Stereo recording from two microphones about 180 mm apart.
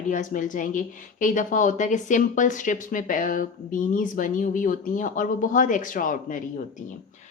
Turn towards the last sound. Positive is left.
turn(degrees=50)  # may be behind; listen again after turning